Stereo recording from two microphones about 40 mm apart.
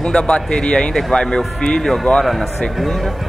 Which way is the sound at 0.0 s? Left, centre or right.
Left.